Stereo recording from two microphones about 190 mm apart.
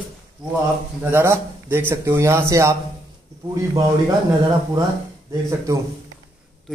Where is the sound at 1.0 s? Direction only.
15° right (ahead or behind).